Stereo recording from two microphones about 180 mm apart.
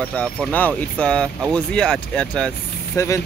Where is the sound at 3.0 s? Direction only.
15° left (ahead or behind).